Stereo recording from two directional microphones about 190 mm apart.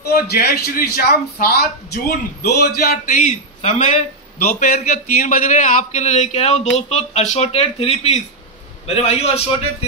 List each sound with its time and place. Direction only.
0.1 s a man's voice: 55° left (ahead or behind); by 9.4 s 35° left (ahead or behind)